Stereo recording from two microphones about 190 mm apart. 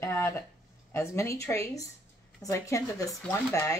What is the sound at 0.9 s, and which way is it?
Speech, 15° left (ahead or behind).